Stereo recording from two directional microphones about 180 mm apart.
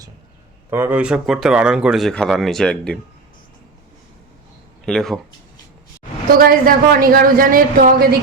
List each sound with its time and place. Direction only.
0.7 s speech: 10° right (ahead or behind); by 3.0 s 5° left (ahead or behind)
4.9 s speech: centre (ahead or behind)
6.4 s a man's voice: 55° right (ahead or behind)